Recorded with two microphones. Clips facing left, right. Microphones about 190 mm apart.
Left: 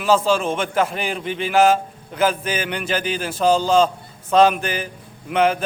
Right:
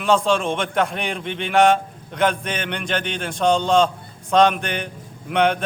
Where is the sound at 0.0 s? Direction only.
5° left (ahead or behind).